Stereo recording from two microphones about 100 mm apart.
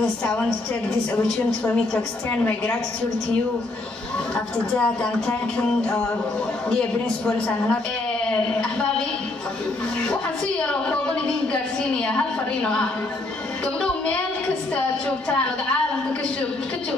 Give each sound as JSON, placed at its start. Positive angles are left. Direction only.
{"t": 0.0, "sound": "a woman's voice", "side_deg": 10}
{"t": 2.4, "sound": "music", "side_deg": 15}
{"t": 4.7, "sound": "music", "side_deg": 10}
{"t": 7.2, "sound": "music", "side_deg": 10}
{"t": 10.6, "sound": "music", "side_deg": 10}